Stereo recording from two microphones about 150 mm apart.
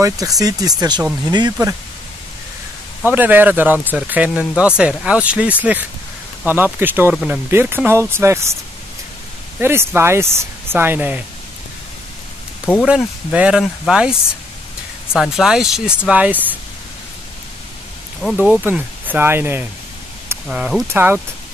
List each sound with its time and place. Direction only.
0.0 s speech: 25° right (ahead or behind)
3.1 s speech: 10° right (ahead or behind)
9.6 s speech: 15° right (ahead or behind)
12.8 s speech: 5° right (ahead or behind)
15.1 s speech: centre (ahead or behind)
18.3 s speech: 10° right (ahead or behind)